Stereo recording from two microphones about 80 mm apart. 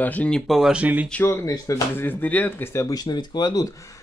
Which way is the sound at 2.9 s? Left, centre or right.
Left.